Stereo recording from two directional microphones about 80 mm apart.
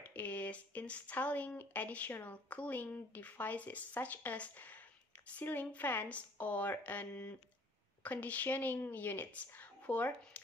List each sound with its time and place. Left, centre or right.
0.0 s speech: left